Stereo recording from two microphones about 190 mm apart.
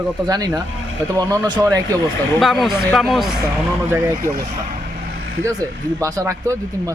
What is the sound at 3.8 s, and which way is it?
Speech, 15° right (ahead or behind).